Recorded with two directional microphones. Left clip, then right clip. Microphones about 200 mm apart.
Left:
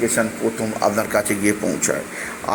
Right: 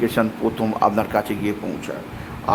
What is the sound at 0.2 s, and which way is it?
Speech, 20° right (ahead or behind).